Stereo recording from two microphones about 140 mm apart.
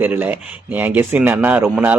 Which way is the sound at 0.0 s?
15° right (ahead or behind).